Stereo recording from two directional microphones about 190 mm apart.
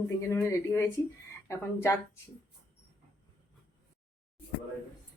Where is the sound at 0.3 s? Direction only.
15° left (ahead or behind).